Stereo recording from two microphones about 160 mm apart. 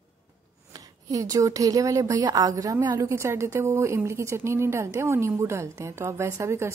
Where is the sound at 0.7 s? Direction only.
20° right (ahead or behind).